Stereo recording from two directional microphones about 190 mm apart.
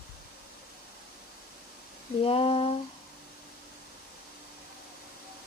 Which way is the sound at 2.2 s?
30° left (ahead or behind).